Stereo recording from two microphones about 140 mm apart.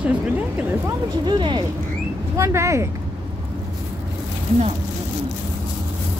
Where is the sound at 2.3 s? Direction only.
20° right (ahead or behind).